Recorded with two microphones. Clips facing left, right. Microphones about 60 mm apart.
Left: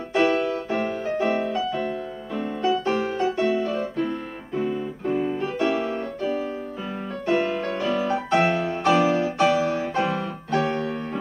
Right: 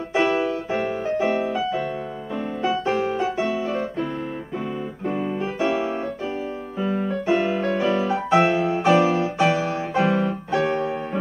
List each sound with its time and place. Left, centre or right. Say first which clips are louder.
0.1 s music: even; centre
4.6 s piano: left 6 dB; centre
5.8 s music: right 1 dB; centre
9.6 s music: left 1 dB; centre
9.9 s music: right 4 dB; centre